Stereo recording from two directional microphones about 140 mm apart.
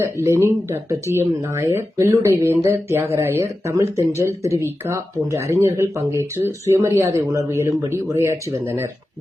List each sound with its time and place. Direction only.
0.0 s speech: 20° right (ahead or behind)